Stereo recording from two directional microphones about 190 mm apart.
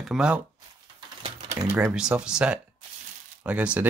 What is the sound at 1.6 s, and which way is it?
Speech, 10° right (ahead or behind).